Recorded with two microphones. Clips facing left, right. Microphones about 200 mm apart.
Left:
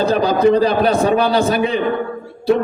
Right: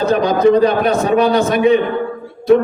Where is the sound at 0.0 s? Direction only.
30° left (ahead or behind).